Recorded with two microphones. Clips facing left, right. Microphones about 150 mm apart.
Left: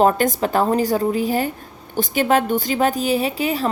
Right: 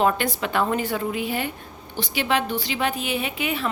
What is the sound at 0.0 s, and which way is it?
A woman's voice, 40° left (ahead or behind).